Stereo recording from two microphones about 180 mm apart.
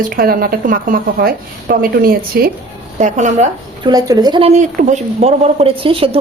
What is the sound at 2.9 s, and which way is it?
Speech, 40° right (ahead or behind).